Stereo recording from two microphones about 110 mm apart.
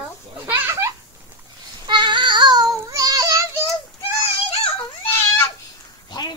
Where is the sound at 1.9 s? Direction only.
45° right (ahead or behind).